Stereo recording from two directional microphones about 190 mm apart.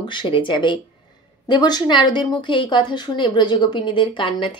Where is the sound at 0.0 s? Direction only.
25° left (ahead or behind).